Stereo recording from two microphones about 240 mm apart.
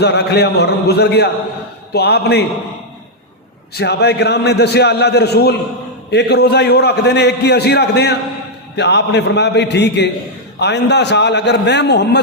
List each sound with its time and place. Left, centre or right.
0.0 s a man's voice: left
3.8 s a man's voice: left